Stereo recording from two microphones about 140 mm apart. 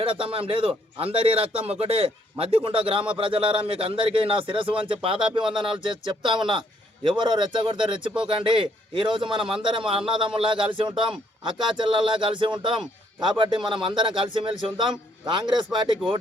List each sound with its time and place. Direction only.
0.0 s speech: 40° right (ahead or behind)